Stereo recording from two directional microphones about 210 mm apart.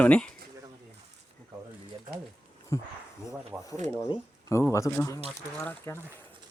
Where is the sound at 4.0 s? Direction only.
15° left (ahead or behind).